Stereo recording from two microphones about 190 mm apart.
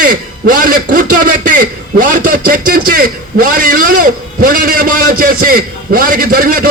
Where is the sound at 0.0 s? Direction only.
45° right (ahead or behind).